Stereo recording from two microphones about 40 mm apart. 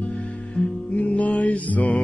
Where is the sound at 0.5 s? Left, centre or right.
Left.